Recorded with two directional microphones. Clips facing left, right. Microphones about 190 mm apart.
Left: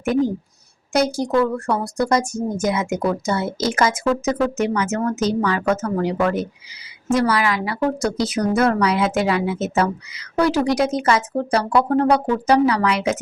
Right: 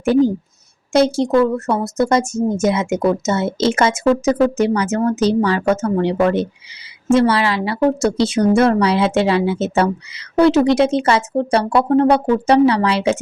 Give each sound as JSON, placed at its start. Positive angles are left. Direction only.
{"t": 0.0, "sound": "a woman's voice", "side_deg": -30}